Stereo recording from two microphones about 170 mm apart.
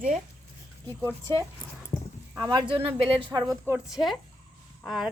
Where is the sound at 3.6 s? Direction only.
5° right (ahead or behind).